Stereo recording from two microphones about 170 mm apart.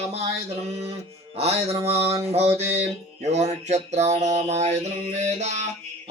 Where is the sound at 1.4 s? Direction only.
35° right (ahead or behind).